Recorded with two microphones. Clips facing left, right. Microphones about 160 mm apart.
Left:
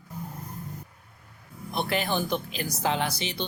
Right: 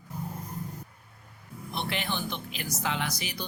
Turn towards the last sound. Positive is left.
turn(degrees=25)  # may be behind; listen again after turning